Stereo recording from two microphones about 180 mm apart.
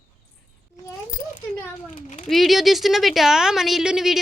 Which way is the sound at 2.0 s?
45° left (ahead or behind).